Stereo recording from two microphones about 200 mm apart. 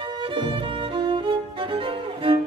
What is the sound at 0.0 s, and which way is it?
Music, 25° right (ahead or behind).